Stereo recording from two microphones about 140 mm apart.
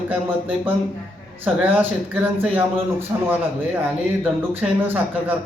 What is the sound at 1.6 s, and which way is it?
Speech, 15° right (ahead or behind).